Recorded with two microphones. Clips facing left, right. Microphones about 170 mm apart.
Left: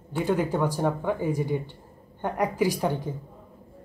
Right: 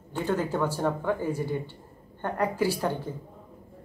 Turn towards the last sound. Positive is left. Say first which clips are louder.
# left 2 dB
turn(degrees=15)  # may be behind; listen again after turning